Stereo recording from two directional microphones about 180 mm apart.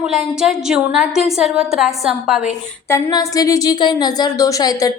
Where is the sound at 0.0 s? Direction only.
Centre (ahead or behind).